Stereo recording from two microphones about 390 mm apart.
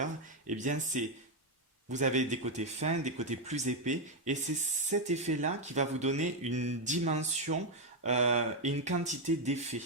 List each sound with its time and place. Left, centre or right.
0.0 s speech: centre